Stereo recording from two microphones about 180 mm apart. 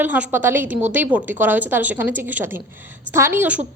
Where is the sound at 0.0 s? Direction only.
10° right (ahead or behind).